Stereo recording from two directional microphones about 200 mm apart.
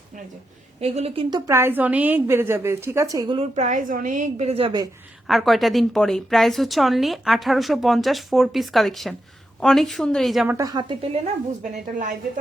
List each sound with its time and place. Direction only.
0.8 s a woman's voice: 30° right (ahead or behind)
1.5 s a woman's voice: 10° right (ahead or behind)
5.3 s a woman's voice: centre (ahead or behind)
10.6 s a woman's voice: 20° right (ahead or behind)